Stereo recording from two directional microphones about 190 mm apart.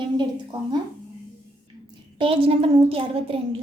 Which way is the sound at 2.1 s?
25° right (ahead or behind).